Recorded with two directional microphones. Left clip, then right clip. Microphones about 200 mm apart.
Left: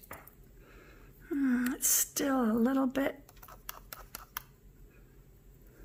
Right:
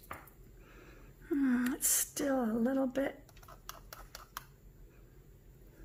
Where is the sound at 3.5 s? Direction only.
40° left (ahead or behind).